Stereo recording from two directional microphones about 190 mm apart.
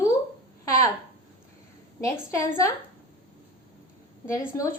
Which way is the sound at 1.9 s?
15° left (ahead or behind).